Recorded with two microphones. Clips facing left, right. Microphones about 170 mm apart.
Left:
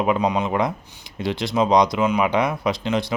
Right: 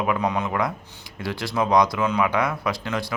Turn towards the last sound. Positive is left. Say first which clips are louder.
# left 4 dB
turn(degrees=20)  # may be behind; listen again after turning